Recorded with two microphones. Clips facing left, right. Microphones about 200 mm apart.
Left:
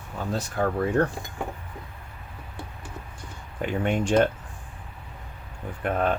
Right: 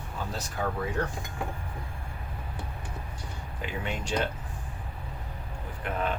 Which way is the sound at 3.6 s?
55° left (ahead or behind).